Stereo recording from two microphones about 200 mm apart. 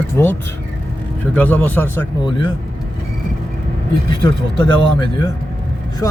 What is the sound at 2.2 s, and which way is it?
Speech, 25° left (ahead or behind).